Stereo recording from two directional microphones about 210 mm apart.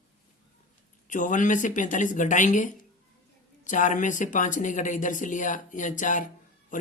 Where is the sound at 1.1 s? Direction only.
35° left (ahead or behind).